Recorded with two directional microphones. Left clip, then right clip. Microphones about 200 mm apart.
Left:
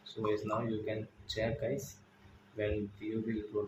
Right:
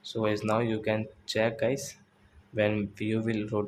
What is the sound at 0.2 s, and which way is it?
Speech, 40° right (ahead or behind).